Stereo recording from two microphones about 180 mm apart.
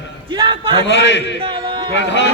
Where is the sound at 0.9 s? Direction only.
80° left.